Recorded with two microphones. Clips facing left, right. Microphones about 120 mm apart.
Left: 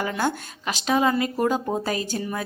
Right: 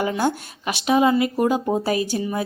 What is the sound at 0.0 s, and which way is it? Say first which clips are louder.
A woman's voice: right 3 dB; 15° right (ahead or behind).